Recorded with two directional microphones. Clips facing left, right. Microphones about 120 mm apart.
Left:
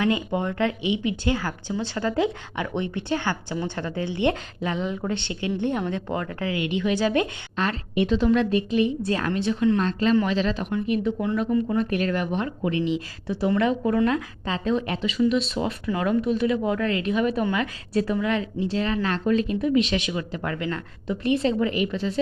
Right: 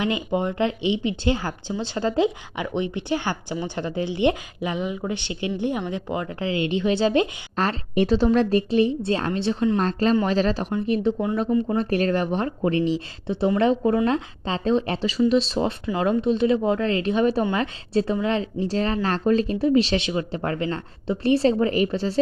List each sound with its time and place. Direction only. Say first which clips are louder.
0.0 s speech: even; 20° right (ahead or behind)
7.5 s a woman's voice: right 2 dB; 40° right (ahead or behind)
13.2 s a woman's voice: right 3 dB; 25° right (ahead or behind)